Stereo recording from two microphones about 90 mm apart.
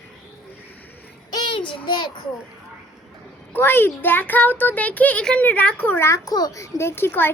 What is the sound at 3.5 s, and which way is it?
Speech, 25° left (ahead or behind).